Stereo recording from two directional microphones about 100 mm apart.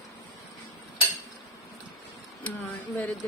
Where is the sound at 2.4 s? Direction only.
15° left (ahead or behind).